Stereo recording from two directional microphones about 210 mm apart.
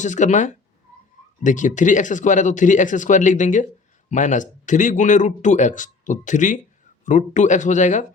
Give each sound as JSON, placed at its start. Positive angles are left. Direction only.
{"t": 0.0, "sound": "speech", "side_deg": 35}